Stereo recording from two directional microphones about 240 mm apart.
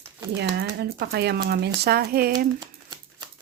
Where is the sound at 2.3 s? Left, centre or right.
Centre.